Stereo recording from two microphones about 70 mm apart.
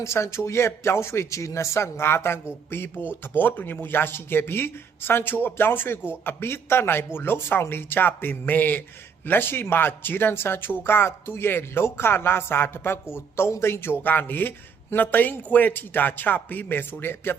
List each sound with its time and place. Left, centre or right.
0.0 s speech: left
14.0 s speech: left